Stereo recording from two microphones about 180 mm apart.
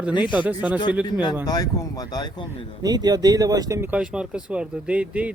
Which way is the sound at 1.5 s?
20° left (ahead or behind).